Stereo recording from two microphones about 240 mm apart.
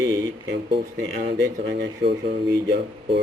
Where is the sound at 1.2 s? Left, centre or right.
Right.